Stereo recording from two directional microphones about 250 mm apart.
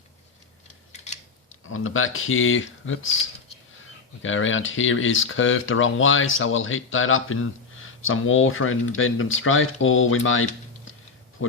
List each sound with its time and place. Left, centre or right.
0.9 s scissors: left
1.7 s speech: left
4.2 s speech: left